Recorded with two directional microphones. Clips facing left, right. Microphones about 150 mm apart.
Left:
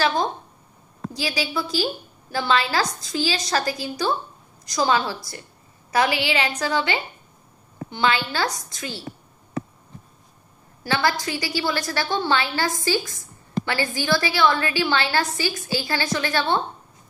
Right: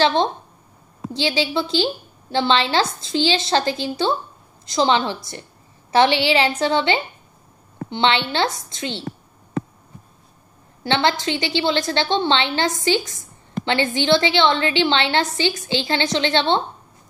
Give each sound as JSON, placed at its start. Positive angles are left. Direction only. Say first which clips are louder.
{"t": 0.0, "sound": "a woman's voice", "louder": "right 4 dB", "side_deg": -25}
{"t": 10.8, "sound": "a woman's voice", "louder": "right 3 dB", "side_deg": -25}